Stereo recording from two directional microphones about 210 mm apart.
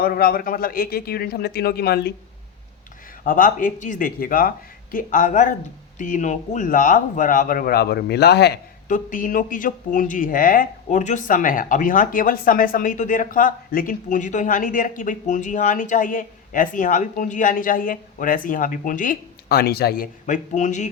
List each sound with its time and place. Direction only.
0.0 s a man's voice: 45° left (ahead or behind)
3.2 s speech: 40° left (ahead or behind)